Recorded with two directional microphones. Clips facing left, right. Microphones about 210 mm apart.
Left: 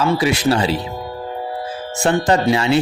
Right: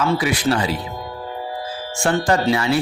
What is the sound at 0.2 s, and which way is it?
Speech, 25° left (ahead or behind).